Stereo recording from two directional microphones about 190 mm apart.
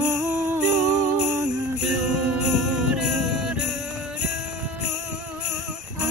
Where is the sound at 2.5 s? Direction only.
Centre (ahead or behind).